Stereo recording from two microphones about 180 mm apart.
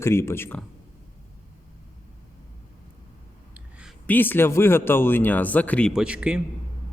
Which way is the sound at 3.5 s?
5° right (ahead or behind).